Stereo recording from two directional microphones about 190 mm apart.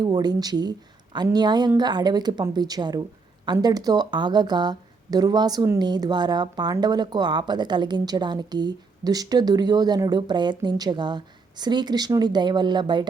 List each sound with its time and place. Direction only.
0.0 s a woman's voice: 20° right (ahead or behind)